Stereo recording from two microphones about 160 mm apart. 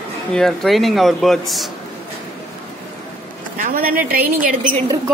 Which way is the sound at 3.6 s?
65° right (ahead or behind).